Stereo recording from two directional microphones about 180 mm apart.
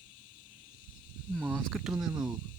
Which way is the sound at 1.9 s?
20° right (ahead or behind).